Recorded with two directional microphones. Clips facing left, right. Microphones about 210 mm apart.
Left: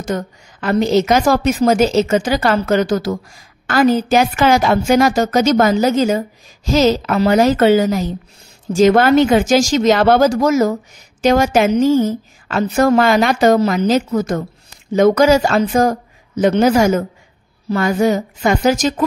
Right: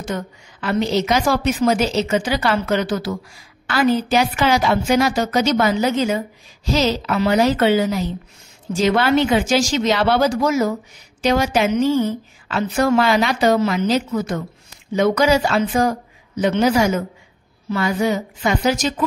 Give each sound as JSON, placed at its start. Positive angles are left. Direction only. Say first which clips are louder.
{"t": 0.0, "sound": "a woman's voice", "louder": "left 4 dB", "side_deg": 45}